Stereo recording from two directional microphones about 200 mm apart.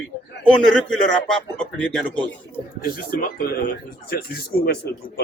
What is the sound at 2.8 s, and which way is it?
Speech, 45° left (ahead or behind).